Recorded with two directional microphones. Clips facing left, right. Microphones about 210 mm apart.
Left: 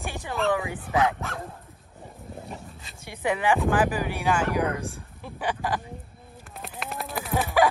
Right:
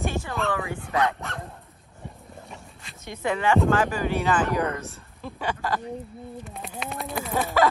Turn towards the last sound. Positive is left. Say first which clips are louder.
# right 1 dB
turn(degrees=0)  # may be behind; listen again after turning